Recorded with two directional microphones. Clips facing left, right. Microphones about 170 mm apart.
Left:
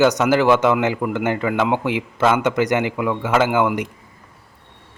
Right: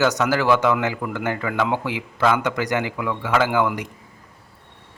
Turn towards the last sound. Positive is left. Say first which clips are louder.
# left 3 dB
turn(degrees=20)  # may be behind; listen again after turning